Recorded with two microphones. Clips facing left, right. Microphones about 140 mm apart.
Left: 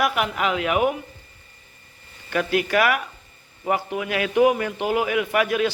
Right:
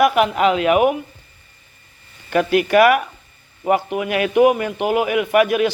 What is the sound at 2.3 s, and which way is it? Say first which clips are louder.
A woman's voice: right 6 dB; 20° right (ahead or behind).